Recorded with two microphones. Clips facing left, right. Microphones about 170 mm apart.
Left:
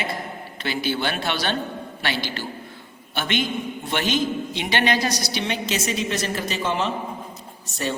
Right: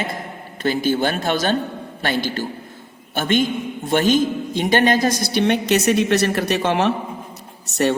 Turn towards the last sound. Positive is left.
turn(degrees=-70)  # may be behind; listen again after turning